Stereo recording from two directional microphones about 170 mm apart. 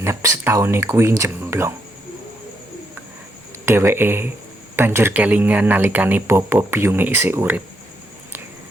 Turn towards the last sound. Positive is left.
turn(degrees=-15)  # may be behind; listen again after turning